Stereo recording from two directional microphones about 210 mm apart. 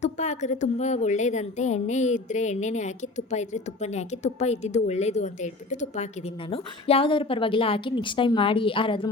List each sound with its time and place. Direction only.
0.0 s a woman's voice: 35° left (ahead or behind)